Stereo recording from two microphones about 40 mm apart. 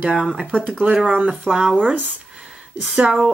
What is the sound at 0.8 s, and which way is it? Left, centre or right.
Speech, right.